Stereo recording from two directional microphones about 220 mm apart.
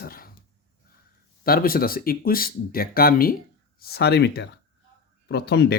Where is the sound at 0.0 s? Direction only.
45° left (ahead or behind).